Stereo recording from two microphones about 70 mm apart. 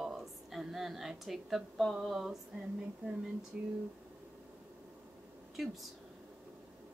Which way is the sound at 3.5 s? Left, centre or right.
Centre.